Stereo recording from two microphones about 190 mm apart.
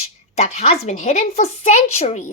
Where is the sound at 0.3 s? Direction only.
35° left (ahead or behind).